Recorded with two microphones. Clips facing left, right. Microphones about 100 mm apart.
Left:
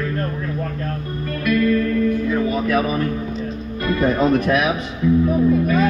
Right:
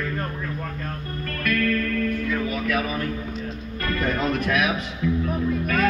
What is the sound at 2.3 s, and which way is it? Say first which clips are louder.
Music: left 6 dB; 30° left (ahead or behind).